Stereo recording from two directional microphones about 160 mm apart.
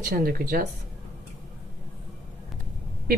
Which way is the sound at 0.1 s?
65° right (ahead or behind).